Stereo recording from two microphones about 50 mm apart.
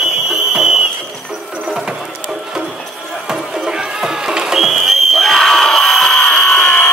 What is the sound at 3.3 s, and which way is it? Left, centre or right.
Music, centre.